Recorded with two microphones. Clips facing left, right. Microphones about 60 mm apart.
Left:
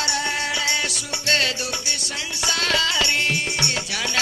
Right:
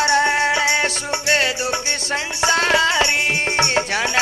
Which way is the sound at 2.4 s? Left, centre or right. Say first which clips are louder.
Right 6 dB; right.